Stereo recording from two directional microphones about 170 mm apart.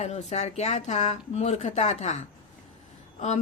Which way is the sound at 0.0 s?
40° left (ahead or behind).